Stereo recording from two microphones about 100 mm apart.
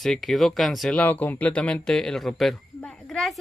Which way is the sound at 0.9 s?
15° left (ahead or behind).